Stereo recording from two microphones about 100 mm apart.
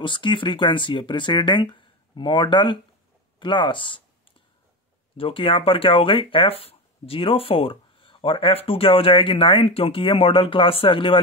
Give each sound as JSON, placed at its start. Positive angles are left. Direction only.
{"t": 0.0, "sound": "speech", "side_deg": 55}
{"t": 5.1, "sound": "speech", "side_deg": 65}